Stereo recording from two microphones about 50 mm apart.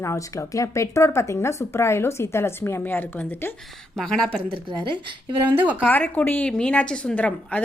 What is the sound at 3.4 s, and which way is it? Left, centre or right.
Speech, left.